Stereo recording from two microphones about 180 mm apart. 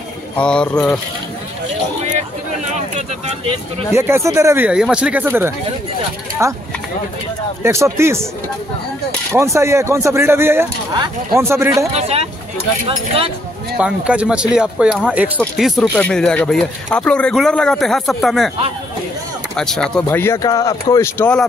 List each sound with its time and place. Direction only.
0.4 s speech: 5° left (ahead or behind)
3.9 s speech: 15° right (ahead or behind)
7.6 s speech: 15° right (ahead or behind)
9.3 s speech: 15° right (ahead or behind)
11.9 s speech: 35° right (ahead or behind)
13.7 s speech: 5° right (ahead or behind)
19.5 s speech: 5° left (ahead or behind)